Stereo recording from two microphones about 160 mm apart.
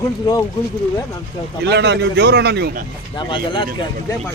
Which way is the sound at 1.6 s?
90° right.